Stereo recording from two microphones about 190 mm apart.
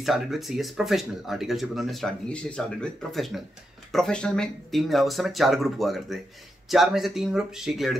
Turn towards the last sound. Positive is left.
turn(degrees=0)  # may be behind; listen again after turning